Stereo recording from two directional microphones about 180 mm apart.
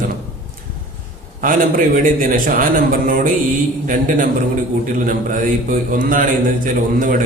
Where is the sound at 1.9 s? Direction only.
50° right (ahead or behind).